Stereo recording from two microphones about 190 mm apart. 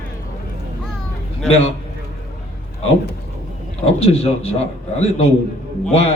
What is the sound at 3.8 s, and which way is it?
Speech, 30° left (ahead or behind).